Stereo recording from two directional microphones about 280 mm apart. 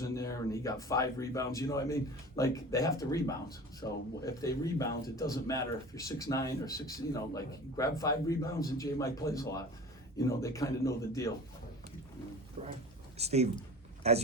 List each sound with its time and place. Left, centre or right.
0.0 s speech: centre
12.6 s speech: right